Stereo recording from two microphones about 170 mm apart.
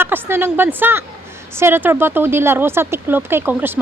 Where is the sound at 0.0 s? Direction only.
15° right (ahead or behind).